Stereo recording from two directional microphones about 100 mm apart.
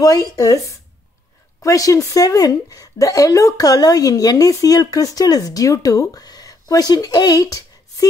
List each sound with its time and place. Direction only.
0.0 s speech: 40° left (ahead or behind)